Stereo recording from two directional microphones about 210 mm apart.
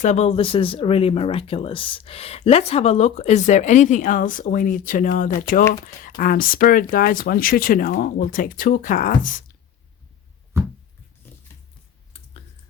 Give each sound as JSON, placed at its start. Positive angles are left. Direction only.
{"t": 0.0, "sound": "speech", "side_deg": 30}